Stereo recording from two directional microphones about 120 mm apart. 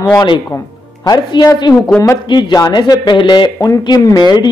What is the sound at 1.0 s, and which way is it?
A man's voice, 35° left (ahead or behind).